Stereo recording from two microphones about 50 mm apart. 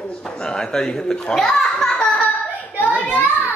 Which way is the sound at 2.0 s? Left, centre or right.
Left.